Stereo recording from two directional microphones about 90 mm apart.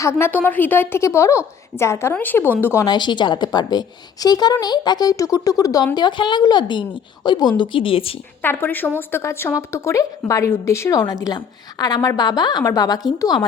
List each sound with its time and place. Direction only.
0.0 s speech: 30° left (ahead or behind)
0.3 s speech: 20° left (ahead or behind)
2.8 s a woman's voice: 55° left (ahead or behind); by 8.1 s 90° left
8.4 s speech: 20° left (ahead or behind)
11.0 s speech: 45° left (ahead or behind)